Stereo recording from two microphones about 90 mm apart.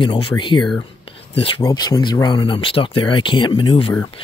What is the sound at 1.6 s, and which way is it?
Speech, 45° left (ahead or behind).